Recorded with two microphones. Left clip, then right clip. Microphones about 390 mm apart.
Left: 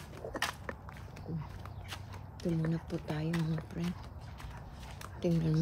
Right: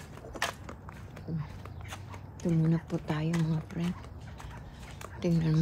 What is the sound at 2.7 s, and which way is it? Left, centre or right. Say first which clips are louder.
Speech: right 5 dB; centre.